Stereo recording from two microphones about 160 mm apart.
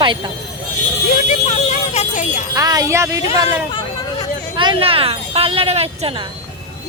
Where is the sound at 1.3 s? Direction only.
45° left (ahead or behind).